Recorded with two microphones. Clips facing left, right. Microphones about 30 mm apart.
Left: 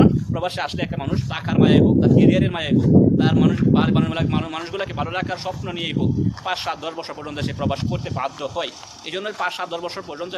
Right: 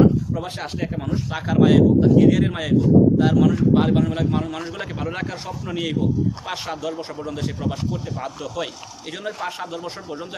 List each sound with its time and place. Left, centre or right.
0.0 s speech: left
1.4 s a man's voice: centre
3.2 s speech: left
3.8 s a man's voice: centre; by 7.8 s left
8.5 s a man's voice: left